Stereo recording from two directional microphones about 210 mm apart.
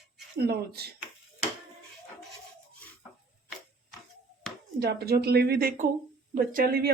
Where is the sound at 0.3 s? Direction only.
50° right (ahead or behind).